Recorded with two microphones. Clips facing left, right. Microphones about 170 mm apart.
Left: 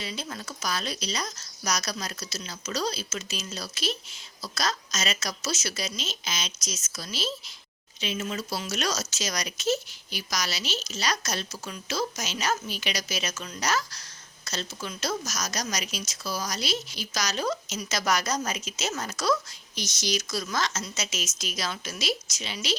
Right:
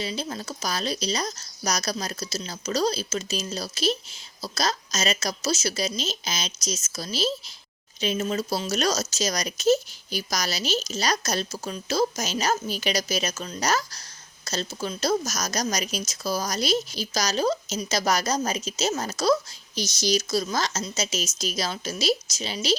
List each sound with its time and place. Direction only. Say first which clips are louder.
0.0 s speech: right 5 dB; 30° right (ahead or behind)